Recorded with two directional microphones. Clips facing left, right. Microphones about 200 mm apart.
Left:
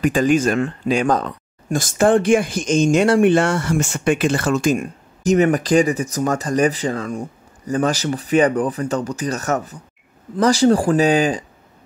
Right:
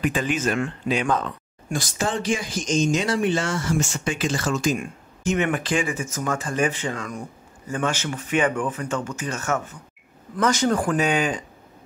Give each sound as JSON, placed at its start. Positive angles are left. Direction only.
{"t": 0.0, "sound": "speech", "side_deg": 40}